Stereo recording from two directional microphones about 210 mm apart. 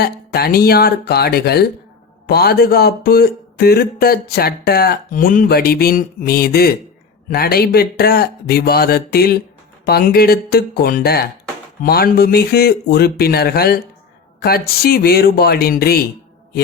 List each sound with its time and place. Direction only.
0.0 s speech: 45° left (ahead or behind)